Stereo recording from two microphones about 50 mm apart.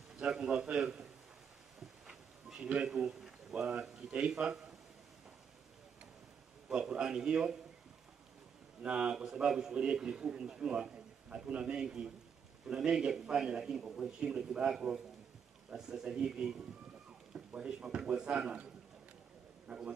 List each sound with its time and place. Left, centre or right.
0.1 s a man's voice: centre
1.8 s a sound: centre
2.7 s a man's voice: centre
6.7 s a man's voice: centre
8.8 s a man's voice: centre
17.6 s a man's voice: centre
19.7 s a man's voice: centre